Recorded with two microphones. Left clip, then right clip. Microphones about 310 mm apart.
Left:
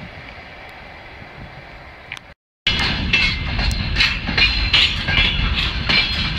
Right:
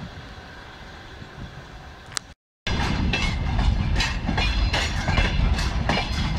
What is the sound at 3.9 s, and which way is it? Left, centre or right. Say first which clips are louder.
Train: left 9 dB; right.